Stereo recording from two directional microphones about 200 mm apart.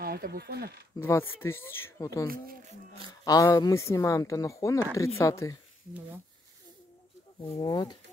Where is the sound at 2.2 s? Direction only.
45° right (ahead or behind).